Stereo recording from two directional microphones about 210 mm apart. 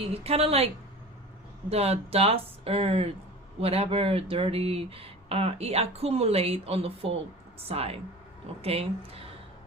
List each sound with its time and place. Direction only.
0.0 s speech: 30° right (ahead or behind)
1.7 s speech: 30° right (ahead or behind)